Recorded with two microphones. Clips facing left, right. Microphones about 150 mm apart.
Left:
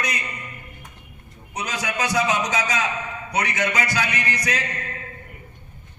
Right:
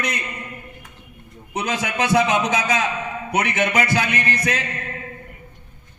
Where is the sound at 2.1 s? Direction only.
30° right (ahead or behind).